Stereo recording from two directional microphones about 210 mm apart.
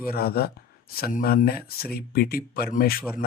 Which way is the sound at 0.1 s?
45° left (ahead or behind).